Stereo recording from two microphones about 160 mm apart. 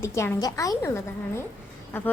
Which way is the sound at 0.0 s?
15° left (ahead or behind).